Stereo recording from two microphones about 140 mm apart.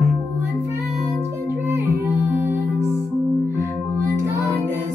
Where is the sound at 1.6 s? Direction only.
20° right (ahead or behind).